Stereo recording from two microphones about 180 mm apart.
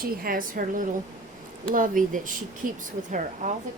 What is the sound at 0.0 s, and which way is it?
Speech, 55° right (ahead or behind).